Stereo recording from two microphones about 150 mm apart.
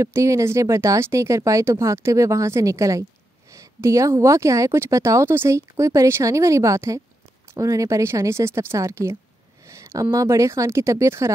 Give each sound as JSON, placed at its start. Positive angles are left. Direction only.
{"t": 0.0, "sound": "a woman's voice", "side_deg": -20}